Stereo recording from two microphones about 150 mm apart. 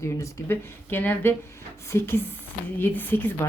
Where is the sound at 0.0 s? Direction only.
15° left (ahead or behind).